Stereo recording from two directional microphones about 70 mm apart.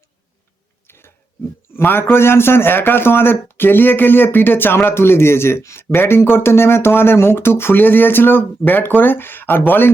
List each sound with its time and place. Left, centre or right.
0.9 s chewing: left
1.7 s a man's voice: left